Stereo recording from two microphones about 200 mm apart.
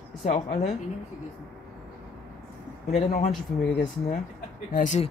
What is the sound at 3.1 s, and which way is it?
Speech, 35° left (ahead or behind).